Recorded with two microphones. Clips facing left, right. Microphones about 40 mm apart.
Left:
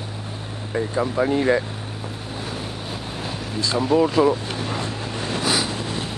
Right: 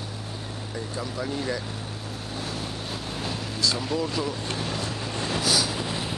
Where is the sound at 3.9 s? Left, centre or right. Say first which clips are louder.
Left 11 dB; left.